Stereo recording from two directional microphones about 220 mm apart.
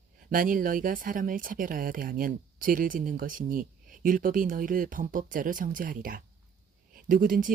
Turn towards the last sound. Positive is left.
turn(degrees=-40)  # may be behind; listen again after turning